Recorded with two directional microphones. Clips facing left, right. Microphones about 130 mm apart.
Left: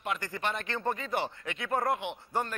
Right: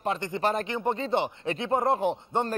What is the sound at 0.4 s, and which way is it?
Speech, 35° right (ahead or behind).